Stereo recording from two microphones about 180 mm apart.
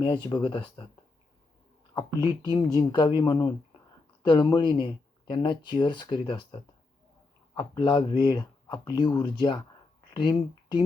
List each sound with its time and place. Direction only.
0.0 s speech: 25° left (ahead or behind)
2.0 s speech: 20° left (ahead or behind)